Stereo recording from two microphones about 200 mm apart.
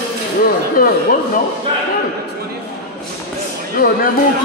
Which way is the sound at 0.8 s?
45° left (ahead or behind).